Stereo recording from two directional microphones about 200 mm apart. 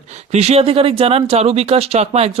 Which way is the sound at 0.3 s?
30° right (ahead or behind).